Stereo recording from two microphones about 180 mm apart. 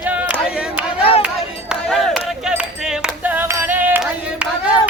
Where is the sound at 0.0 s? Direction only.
10° right (ahead or behind).